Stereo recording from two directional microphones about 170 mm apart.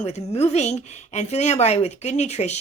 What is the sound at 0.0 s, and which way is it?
Speech, 40° left (ahead or behind).